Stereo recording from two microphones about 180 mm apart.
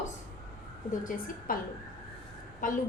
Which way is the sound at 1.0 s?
50° left (ahead or behind).